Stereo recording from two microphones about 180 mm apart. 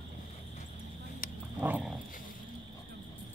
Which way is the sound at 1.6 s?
10° right (ahead or behind).